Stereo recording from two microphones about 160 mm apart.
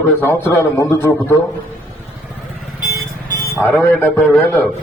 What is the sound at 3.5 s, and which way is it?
Speech, 15° left (ahead or behind).